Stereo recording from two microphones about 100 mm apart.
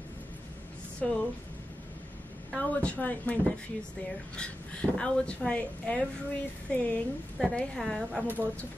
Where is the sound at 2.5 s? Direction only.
15° left (ahead or behind).